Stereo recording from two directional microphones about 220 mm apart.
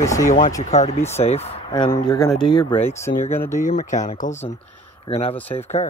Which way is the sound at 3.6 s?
35° left (ahead or behind).